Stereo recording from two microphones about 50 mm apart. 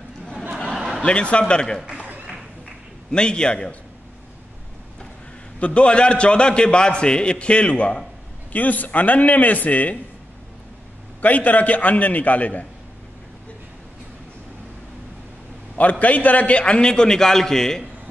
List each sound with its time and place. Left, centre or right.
0.7 s a sound: centre
1.0 s a man's voice: left
3.1 s a man's voice: centre
5.6 s a man's voice: left
11.1 s a man's voice: left
15.8 s a man's voice: left; by 17.8 s centre